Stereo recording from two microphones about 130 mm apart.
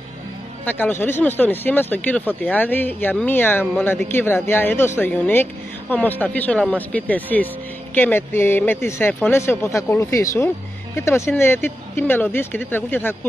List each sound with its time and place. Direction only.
0.7 s speech: 15° left (ahead or behind)